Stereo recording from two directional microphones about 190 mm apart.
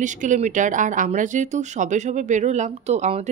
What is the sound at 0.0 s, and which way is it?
Speech, 40° right (ahead or behind).